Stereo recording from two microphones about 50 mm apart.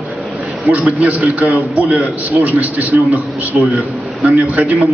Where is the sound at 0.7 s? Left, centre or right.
Right.